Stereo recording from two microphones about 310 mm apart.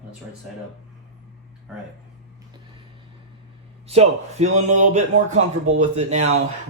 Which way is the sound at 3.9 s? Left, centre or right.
Right.